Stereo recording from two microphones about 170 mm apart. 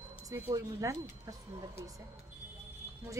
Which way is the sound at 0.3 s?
20° right (ahead or behind).